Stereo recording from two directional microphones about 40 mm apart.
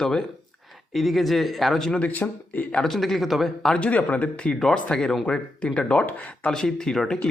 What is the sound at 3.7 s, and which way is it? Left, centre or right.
Speech, left.